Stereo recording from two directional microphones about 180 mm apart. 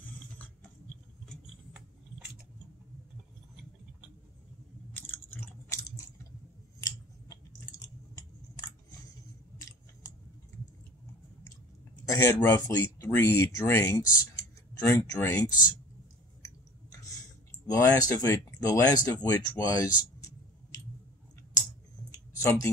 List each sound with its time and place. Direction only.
1.3 s a sound: 5° right (ahead or behind)
4.9 s chewing: 10° left (ahead or behind)
9.6 s scissors: 20° left (ahead or behind)
12.1 s speech: 15° left (ahead or behind)
17.7 s speech: 20° left (ahead or behind)
22.4 s speech: 15° left (ahead or behind)